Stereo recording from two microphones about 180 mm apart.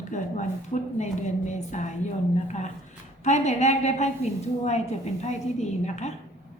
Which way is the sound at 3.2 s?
40° left (ahead or behind).